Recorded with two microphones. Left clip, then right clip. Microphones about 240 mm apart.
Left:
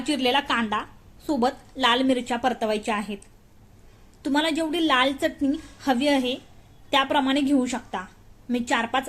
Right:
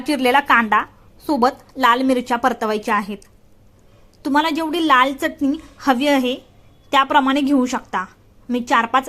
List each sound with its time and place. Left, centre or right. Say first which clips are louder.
0.3 s a woman's voice: right 10 dB; centre